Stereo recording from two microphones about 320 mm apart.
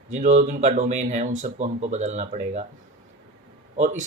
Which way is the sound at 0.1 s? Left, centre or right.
Right.